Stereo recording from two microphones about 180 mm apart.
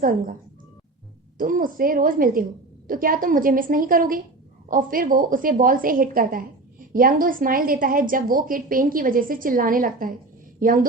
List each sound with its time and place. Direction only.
0.0 s a woman's voice: 50° right (ahead or behind)
1.4 s a woman's voice: 50° right (ahead or behind)